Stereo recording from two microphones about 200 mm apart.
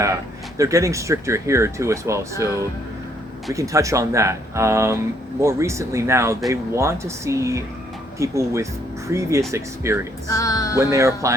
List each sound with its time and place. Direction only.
0.0 s speech: 15° right (ahead or behind)
3.5 s speech: 15° right (ahead or behind)
10.2 s speech: 15° left (ahead or behind)
10.8 s speech: 15° right (ahead or behind)